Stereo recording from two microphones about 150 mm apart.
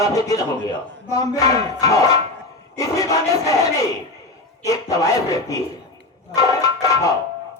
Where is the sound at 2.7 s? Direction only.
25° left (ahead or behind).